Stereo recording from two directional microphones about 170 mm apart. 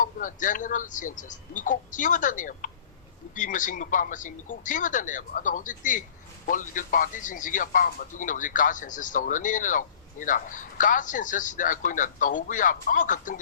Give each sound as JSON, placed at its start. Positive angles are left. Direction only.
{"t": 0.0, "sound": "speech", "side_deg": 50}